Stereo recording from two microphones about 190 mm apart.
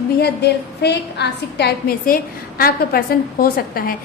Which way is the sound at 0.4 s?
60° left (ahead or behind).